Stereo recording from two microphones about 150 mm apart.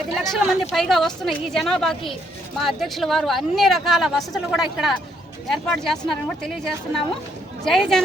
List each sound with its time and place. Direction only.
0.2 s speech: centre (ahead or behind)